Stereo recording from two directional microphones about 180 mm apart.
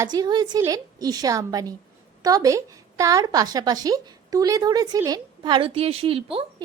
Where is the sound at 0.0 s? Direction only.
20° right (ahead or behind).